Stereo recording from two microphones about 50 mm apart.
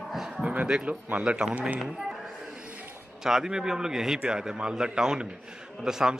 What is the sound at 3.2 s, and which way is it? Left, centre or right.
Speech, centre.